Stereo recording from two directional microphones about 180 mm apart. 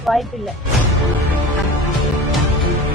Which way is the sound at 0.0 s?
Centre (ahead or behind).